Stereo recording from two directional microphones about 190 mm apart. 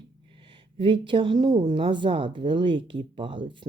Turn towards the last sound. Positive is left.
turn(degrees=-25)  # may be behind; listen again after turning